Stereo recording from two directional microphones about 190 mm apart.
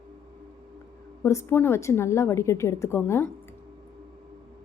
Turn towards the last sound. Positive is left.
turn(degrees=10)  # may be behind; listen again after turning